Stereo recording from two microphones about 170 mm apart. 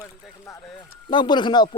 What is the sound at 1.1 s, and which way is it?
Speech, 25° left (ahead or behind).